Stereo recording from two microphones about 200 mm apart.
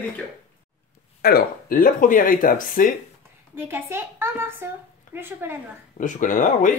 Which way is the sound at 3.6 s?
10° right (ahead or behind).